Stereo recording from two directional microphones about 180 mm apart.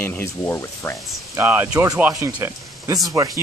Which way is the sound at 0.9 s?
Centre (ahead or behind).